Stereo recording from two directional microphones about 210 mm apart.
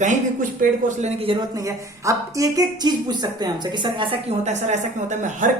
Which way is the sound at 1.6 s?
15° right (ahead or behind).